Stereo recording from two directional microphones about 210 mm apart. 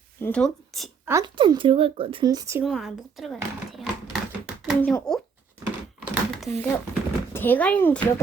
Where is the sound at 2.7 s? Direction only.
Centre (ahead or behind).